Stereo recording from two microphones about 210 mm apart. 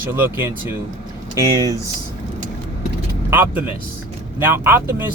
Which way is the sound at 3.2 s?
10° right (ahead or behind).